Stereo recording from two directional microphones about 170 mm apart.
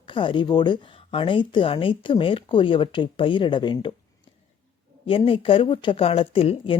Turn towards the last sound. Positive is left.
turn(degrees=35)  # may be behind; listen again after turning